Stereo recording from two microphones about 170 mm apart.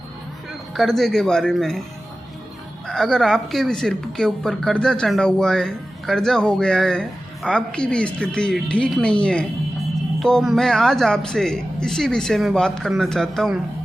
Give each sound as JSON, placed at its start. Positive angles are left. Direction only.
{"t": 0.7, "sound": "speech", "side_deg": 0}
{"t": 2.8, "sound": "speech", "side_deg": 0}